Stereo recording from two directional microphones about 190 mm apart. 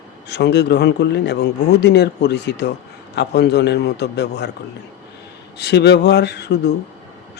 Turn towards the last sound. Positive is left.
turn(degrees=60)  # may be behind; listen again after turning